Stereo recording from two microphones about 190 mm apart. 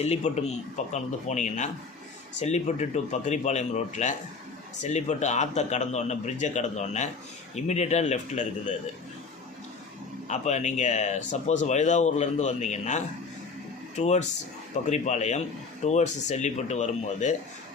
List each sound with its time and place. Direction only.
0.0 s speech: 35° left (ahead or behind)
10.2 s speech: 35° left (ahead or behind)